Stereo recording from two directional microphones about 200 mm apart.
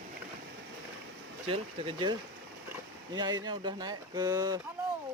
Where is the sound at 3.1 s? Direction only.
20° right (ahead or behind).